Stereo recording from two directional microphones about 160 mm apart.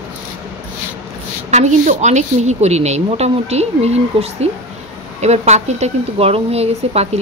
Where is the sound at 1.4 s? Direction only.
45° right (ahead or behind).